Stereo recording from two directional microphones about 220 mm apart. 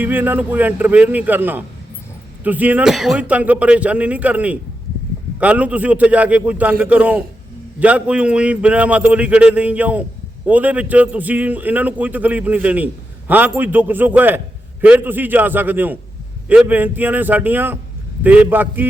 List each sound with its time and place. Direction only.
0.0 s a man's voice: 10° right (ahead or behind)